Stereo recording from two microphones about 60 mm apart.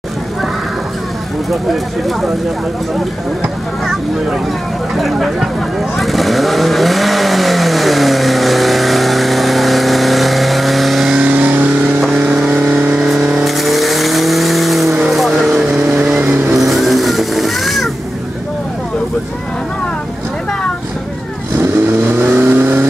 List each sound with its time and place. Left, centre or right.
4.9 s speech: centre
5.9 s vehicle: centre
11.1 s vehicle: right
12.3 s vehicle: centre
13.5 s vehicle: centre
16.0 s vehicle: right
16.5 s vehicle: centre
22.0 s vehicle: right